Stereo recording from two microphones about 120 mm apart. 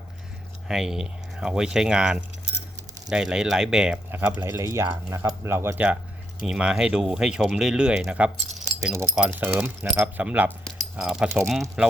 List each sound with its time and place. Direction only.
0.7 s speech: 5° right (ahead or behind)
4.1 s speech: 15° right (ahead or behind); by 11.9 s centre (ahead or behind)